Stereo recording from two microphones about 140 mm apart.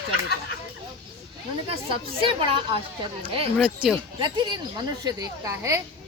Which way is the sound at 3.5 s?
5° right (ahead or behind).